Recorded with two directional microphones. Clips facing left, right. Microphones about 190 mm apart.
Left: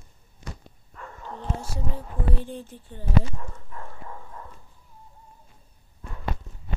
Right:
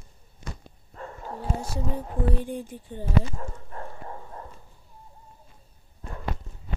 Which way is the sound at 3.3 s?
40° right (ahead or behind).